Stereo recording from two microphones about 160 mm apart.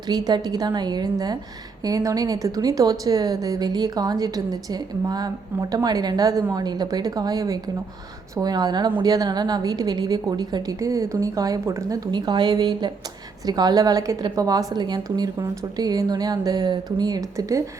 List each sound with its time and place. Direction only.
0.1 s a woman's voice: 25° right (ahead or behind)